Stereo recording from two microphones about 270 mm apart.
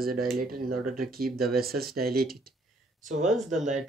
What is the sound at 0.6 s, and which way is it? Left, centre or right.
Speech, right.